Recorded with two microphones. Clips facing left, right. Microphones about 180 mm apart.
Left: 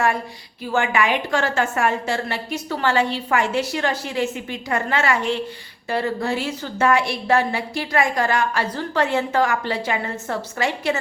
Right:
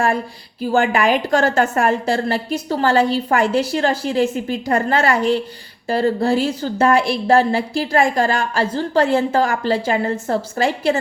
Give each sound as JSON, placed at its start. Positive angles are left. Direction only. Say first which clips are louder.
{"t": 0.7, "sound": "a woman's voice", "louder": "right 4 dB", "side_deg": -35}